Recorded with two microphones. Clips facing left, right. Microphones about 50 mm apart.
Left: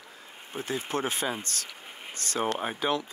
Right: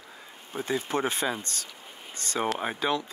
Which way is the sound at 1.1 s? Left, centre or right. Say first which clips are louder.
Right 2 dB; centre.